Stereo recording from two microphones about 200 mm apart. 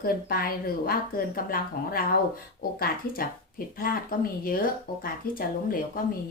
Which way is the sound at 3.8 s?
45° left (ahead or behind).